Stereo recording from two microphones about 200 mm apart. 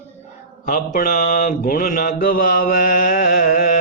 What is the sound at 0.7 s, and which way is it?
Mantra, 45° left (ahead or behind).